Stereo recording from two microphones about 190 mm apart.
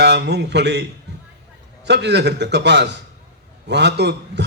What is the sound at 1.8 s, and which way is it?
A man's voice, 65° right (ahead or behind).